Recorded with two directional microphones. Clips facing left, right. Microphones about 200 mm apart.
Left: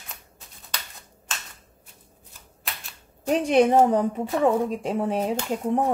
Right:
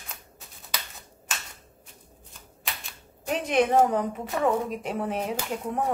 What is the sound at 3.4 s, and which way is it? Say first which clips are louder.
Speech: left 3 dB; 30° left (ahead or behind).